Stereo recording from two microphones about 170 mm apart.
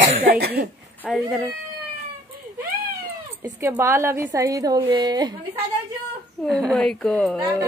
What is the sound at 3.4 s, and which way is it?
A woman's voice, 15° right (ahead or behind).